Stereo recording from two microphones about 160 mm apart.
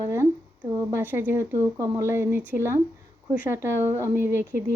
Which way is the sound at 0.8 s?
20° right (ahead or behind).